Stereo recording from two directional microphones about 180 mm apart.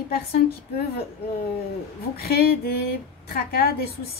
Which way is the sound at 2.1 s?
60° left (ahead or behind).